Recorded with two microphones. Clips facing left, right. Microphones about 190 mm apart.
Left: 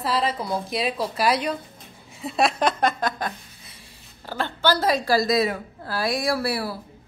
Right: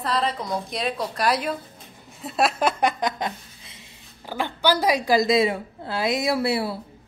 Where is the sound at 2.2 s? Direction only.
Centre (ahead or behind); by 3.8 s 20° right (ahead or behind).